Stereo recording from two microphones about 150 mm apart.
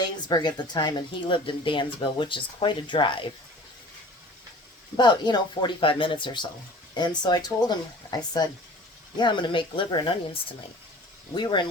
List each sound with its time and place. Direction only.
0.0 s speech: 30° left (ahead or behind)
4.9 s speech: 30° left (ahead or behind)
11.3 s speech: 30° left (ahead or behind)